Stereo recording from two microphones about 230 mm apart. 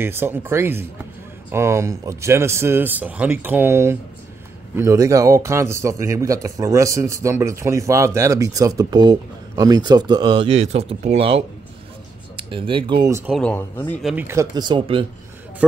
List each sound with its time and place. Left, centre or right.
0.0 s a man's voice: centre
13.3 s speech: centre
14.0 s a man's voice: centre